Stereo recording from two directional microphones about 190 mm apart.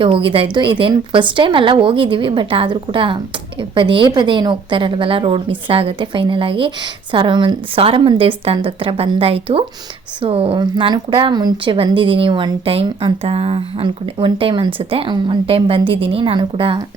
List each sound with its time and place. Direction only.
0.0 s a woman's voice: 30° right (ahead or behind)